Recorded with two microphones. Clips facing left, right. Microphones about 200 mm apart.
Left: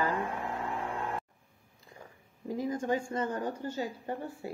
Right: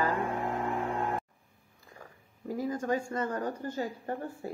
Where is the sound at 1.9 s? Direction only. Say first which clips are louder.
Even; 20° left (ahead or behind).